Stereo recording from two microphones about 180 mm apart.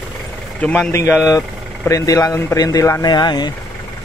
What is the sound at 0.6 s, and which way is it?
Speech, 5° left (ahead or behind).